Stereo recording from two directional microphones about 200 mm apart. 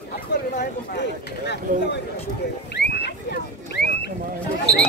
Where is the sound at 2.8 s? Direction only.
55° left (ahead or behind).